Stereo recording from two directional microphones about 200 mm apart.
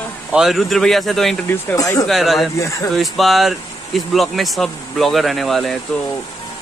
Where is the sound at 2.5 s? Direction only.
15° left (ahead or behind).